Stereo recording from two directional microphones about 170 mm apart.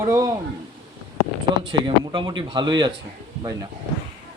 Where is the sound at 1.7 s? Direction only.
30° right (ahead or behind).